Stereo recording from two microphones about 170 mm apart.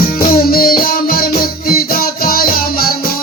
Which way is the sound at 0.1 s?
60° left (ahead or behind).